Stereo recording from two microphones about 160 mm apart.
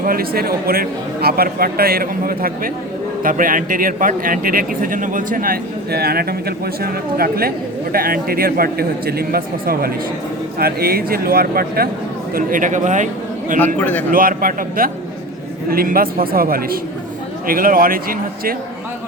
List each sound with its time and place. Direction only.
0.0 s a man's voice: 65° right (ahead or behind); by 13.1 s 50° right (ahead or behind)
13.7 s a man's voice: 10° left (ahead or behind)
14.1 s a man's voice: 60° right (ahead or behind)